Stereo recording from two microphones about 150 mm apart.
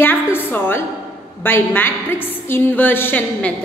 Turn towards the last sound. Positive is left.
turn(degrees=15)  # may be behind; listen again after turning